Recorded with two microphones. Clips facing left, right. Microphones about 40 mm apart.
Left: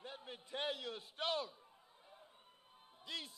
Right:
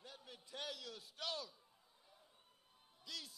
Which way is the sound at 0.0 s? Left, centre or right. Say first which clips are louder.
Left 6 dB; left.